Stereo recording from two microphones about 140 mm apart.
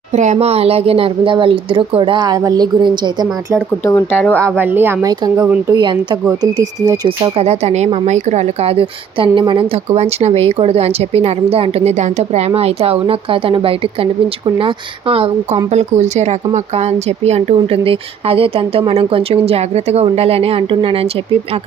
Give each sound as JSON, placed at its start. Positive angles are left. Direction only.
{"t": 0.2, "sound": "speech", "side_deg": -50}
{"t": 3.8, "sound": "speech", "side_deg": 20}
{"t": 4.4, "sound": "speech", "side_deg": -15}
{"t": 5.0, "sound": "speech", "side_deg": -30}
{"t": 7.3, "sound": "speech", "side_deg": -50}
{"t": 9.9, "sound": "speech", "side_deg": -50}
{"t": 15.7, "sound": "speech", "side_deg": -55}